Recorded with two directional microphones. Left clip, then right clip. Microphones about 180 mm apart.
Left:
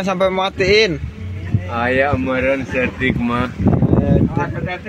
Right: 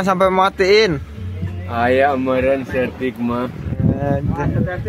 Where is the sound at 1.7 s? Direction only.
65° right (ahead or behind).